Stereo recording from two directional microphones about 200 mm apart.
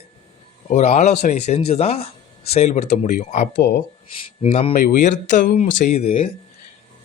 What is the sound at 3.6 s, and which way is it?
Speech, 60° left (ahead or behind).